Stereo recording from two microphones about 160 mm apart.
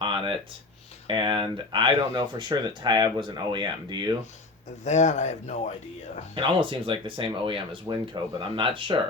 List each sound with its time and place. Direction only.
1.0 s speech: 30° right (ahead or behind)
4.8 s speech: 50° left (ahead or behind)
6.3 s speech: 30° right (ahead or behind)